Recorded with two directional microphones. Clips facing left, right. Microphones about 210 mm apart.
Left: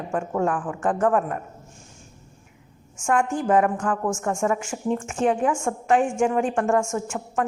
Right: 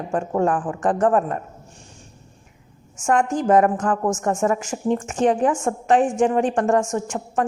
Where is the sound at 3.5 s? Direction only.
40° right (ahead or behind).